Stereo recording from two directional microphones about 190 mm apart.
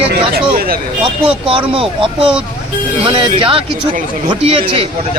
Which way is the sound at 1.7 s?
30° right (ahead or behind).